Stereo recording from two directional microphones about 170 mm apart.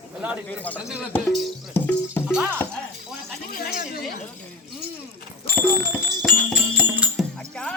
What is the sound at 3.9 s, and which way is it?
Speech, 60° left (ahead or behind).